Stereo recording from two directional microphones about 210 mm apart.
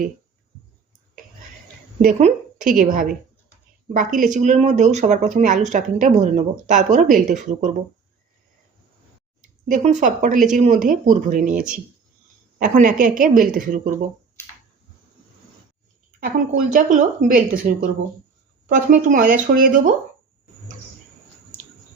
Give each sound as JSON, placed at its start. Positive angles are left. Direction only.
{"t": 2.0, "sound": "speech", "side_deg": -35}
{"t": 9.6, "sound": "speech", "side_deg": -35}
{"t": 16.5, "sound": "speech", "side_deg": -40}